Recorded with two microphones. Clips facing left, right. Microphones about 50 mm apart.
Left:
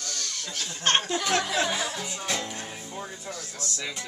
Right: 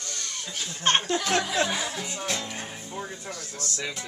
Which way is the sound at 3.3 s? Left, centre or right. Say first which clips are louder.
Even; right.